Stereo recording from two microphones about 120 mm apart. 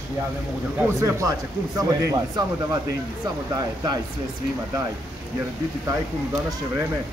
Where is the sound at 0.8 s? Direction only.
20° right (ahead or behind).